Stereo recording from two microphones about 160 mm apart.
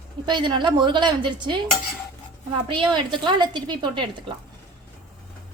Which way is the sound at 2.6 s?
30° right (ahead or behind).